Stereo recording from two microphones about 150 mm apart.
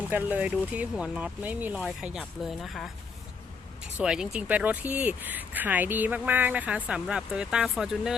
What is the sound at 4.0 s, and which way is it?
Speech, 5° right (ahead or behind).